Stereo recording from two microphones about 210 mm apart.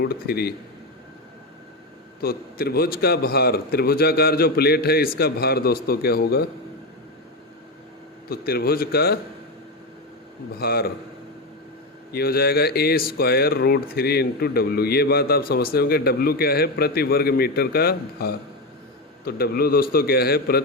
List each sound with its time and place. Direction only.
0.0 s speech: 50° left (ahead or behind)
2.2 s speech: 45° left (ahead or behind)
8.3 s speech: 45° left (ahead or behind)
10.6 s speech: 45° left (ahead or behind)
12.1 s speech: 45° left (ahead or behind)